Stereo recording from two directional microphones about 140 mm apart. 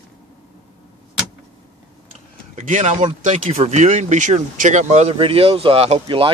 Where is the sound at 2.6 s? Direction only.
65° right (ahead or behind).